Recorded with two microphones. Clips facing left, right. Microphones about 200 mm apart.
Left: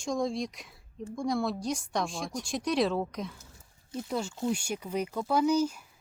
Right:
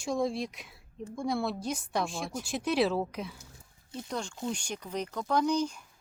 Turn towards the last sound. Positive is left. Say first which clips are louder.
# left 2 dB
turn(degrees=5)  # may be behind; listen again after turning